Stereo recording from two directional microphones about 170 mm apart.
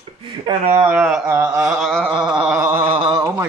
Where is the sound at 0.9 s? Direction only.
Centre (ahead or behind).